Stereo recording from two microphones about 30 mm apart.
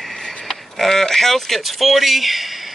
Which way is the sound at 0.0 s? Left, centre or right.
Centre.